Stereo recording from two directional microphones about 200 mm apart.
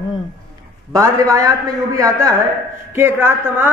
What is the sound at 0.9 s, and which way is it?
A man's voice, 15° right (ahead or behind).